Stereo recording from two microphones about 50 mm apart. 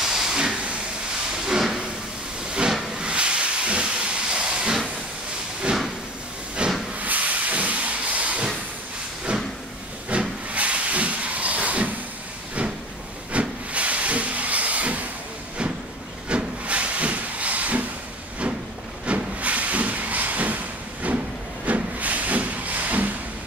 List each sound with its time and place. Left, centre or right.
0.0 s steam: centre
1.4 s hiss: centre
2.9 s steam: centre
6.6 s hiss: right
7.0 s hiss: right
9.3 s a sound: right
10.0 s hiss: right
13.3 s hiss: right
16.3 s hiss: right
19.0 s vehicle: right
21.6 s hiss: right